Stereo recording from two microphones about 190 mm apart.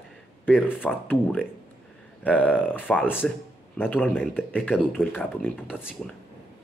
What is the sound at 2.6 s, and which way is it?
Speech, 10° left (ahead or behind).